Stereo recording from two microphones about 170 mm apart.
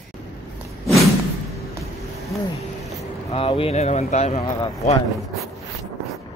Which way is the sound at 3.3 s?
35° left (ahead or behind).